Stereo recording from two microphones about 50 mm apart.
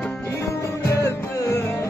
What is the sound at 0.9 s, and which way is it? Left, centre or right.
Music, left.